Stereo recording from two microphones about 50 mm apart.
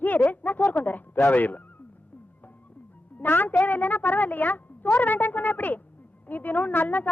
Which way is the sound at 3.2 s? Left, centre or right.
Left.